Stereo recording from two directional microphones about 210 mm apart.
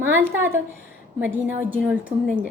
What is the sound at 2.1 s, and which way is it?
Speech, 30° right (ahead or behind).